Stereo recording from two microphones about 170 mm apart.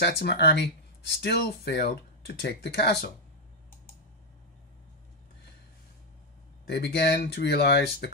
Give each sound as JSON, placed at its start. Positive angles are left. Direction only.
{"t": 0.0, "sound": "speech", "side_deg": 75}
{"t": 6.7, "sound": "speech", "side_deg": 75}